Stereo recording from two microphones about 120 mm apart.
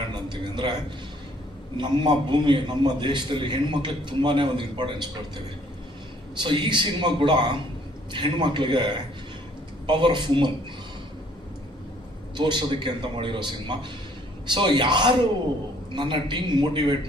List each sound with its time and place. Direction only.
0.1 s a sound: 40° right (ahead or behind)
1.8 s a man's voice: 40° right (ahead or behind)
6.3 s a man's voice: 40° right (ahead or behind)
12.4 s a man's voice: 40° right (ahead or behind)